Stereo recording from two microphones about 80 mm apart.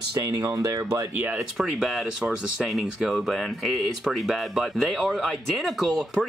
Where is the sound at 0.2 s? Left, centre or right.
Right.